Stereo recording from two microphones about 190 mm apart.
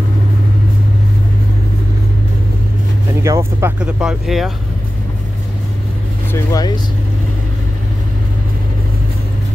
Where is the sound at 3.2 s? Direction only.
15° right (ahead or behind).